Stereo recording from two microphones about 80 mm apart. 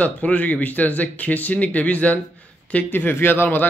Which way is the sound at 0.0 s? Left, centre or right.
Centre.